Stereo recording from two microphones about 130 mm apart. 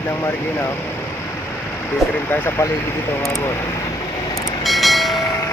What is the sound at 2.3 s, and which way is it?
Speech, 15° left (ahead or behind).